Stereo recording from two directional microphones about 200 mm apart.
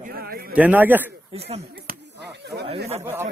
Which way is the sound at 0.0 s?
50° right (ahead or behind).